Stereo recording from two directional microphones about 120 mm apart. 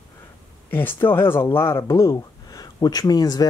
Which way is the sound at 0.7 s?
15° left (ahead or behind).